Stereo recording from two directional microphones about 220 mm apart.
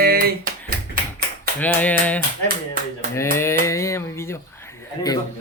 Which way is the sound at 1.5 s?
5° left (ahead or behind).